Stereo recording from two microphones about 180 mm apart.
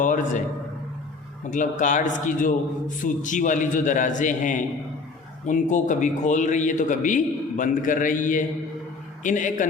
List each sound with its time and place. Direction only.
0.0 s a man's voice: 45° left (ahead or behind)
1.5 s a man's voice: 45° left (ahead or behind)